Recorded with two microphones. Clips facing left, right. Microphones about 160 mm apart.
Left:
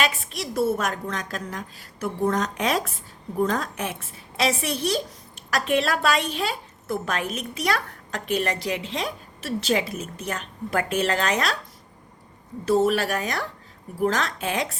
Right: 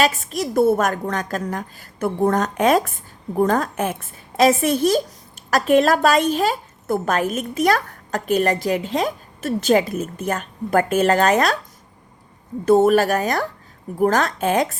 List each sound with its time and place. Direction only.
0.0 s a woman's voice: 40° right (ahead or behind)
12.6 s a woman's voice: 50° right (ahead or behind)